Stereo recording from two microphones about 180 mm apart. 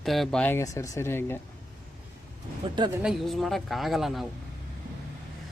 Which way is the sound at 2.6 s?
25° right (ahead or behind).